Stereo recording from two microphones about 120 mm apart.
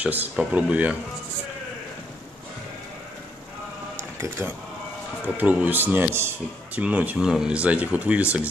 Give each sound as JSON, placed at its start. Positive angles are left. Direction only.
{"t": 0.0, "sound": "speech", "side_deg": -15}
{"t": 4.4, "sound": "speech", "side_deg": -15}